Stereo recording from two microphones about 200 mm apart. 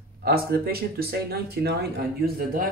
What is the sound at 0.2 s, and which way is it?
Speech, 50° right (ahead or behind).